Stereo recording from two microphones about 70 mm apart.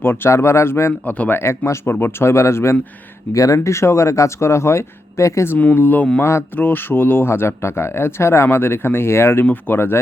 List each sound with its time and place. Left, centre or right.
0.0 s speech: left
0.3 s speech: left
1.0 s speech: left
1.4 s speech: left
3.3 s speech: left
5.5 s speech: left